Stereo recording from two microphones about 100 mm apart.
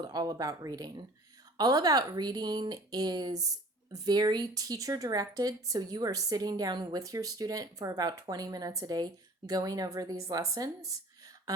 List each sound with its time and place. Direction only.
0.0 s speech: 40° right (ahead or behind)